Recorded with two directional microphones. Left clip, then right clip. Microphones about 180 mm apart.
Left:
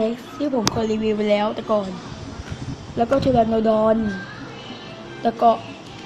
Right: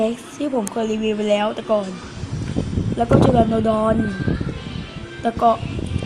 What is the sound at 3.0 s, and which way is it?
Speech, 10° right (ahead or behind).